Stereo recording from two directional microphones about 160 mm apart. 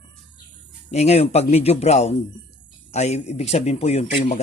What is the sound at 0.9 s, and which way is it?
Speech, 40° left (ahead or behind).